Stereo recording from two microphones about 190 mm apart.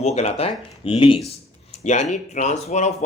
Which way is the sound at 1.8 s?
40° left (ahead or behind).